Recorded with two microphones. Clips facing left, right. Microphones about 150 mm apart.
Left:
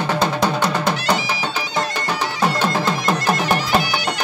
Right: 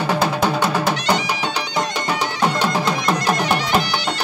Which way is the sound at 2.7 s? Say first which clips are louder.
Even; 15° right (ahead or behind).